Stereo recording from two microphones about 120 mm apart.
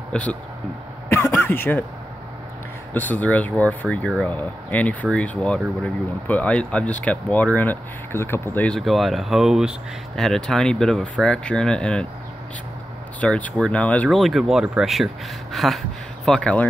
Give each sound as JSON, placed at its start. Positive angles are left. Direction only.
{"t": 0.1, "sound": "speech", "side_deg": 10}
{"t": 1.0, "sound": "throat clearing", "side_deg": 20}
{"t": 2.9, "sound": "speech", "side_deg": 15}
{"t": 8.6, "sound": "speech", "side_deg": 0}
{"t": 13.2, "sound": "speech", "side_deg": 10}